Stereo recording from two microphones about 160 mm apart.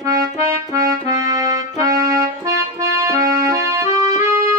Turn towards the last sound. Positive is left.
turn(degrees=-25)  # may be behind; listen again after turning